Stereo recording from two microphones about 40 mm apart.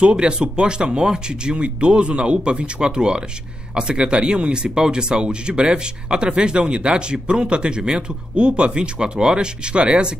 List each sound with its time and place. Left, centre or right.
0.0 s speech: right